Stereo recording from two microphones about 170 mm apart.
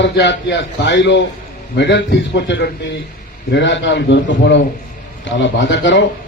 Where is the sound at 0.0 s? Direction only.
90° left.